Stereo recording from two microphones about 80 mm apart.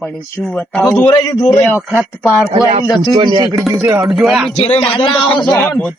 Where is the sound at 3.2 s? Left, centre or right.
Right.